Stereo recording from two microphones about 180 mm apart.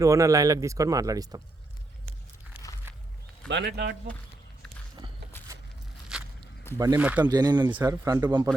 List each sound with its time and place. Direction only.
0.0 s speech: 15° right (ahead or behind)
3.5 s speech: 70° right (ahead or behind)
5.5 s a sound: 15° right (ahead or behind)
6.1 s walk: 5° right (ahead or behind)
6.7 s speech: 15° right (ahead or behind)
7.3 s speech: 20° right (ahead or behind)